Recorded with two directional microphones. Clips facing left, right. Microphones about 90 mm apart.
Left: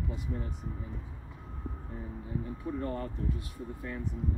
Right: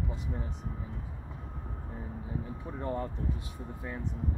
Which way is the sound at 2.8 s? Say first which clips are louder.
Right 4 dB; 20° right (ahead or behind).